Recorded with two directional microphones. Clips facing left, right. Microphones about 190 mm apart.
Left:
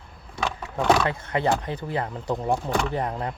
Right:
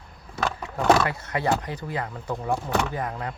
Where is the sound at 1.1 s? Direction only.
20° left (ahead or behind).